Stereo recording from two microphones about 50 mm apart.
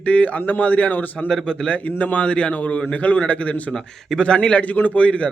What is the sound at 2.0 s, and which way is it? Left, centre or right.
A man's voice, left.